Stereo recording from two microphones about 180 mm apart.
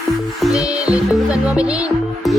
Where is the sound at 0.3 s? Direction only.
Centre (ahead or behind).